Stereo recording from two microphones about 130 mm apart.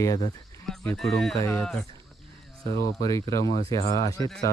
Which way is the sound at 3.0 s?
25° left (ahead or behind).